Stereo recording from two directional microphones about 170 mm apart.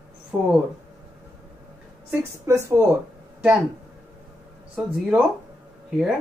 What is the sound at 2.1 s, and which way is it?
Speech, 15° right (ahead or behind).